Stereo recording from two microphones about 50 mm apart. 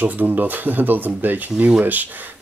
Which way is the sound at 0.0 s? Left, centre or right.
Right.